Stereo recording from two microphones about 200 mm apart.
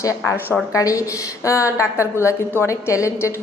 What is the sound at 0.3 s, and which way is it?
A woman's voice, 10° left (ahead or behind).